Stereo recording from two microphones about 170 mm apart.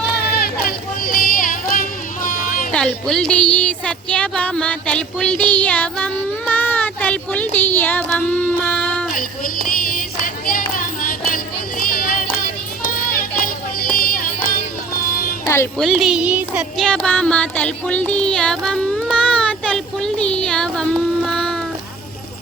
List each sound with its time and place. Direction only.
0.2 s a sound: 65° left (ahead or behind)
2.7 s speech: 5° left (ahead or behind)
9.6 s a sound: 55° left (ahead or behind)
12.8 s child singing: 60° left (ahead or behind)
13.9 s music: 60° left (ahead or behind)
15.4 s music: 15° left (ahead or behind)
15.8 s music: centre (ahead or behind)